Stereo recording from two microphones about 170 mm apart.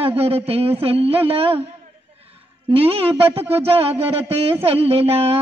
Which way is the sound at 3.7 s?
35° right (ahead or behind).